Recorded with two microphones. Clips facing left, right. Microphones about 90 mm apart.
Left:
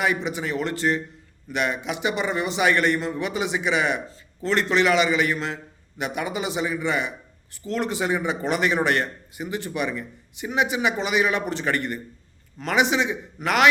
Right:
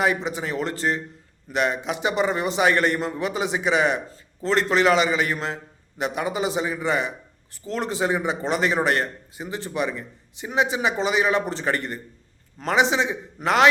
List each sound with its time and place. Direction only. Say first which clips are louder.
0.0 s a man's voice: right 1 dB; 35° right (ahead or behind)